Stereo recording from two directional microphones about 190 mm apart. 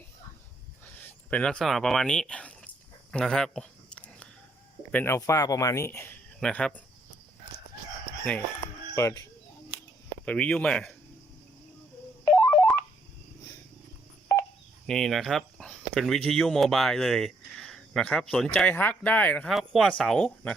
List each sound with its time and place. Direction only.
0.9 s speech: 10° left (ahead or behind)
3.1 s a sound: 5° left (ahead or behind)
4.9 s speech: 10° left (ahead or behind)
9.0 s speech: 15° left (ahead or behind)
12.2 s music: 5° left (ahead or behind)
14.8 s speech: centre (ahead or behind)